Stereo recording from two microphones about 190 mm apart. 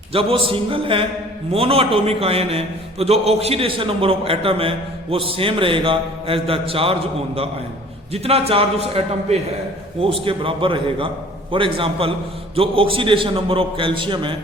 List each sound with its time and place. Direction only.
0.1 s a man's voice: 30° right (ahead or behind)